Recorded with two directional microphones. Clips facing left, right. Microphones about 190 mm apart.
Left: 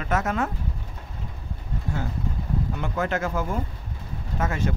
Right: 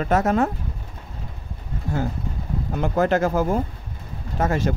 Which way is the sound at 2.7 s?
40° right (ahead or behind).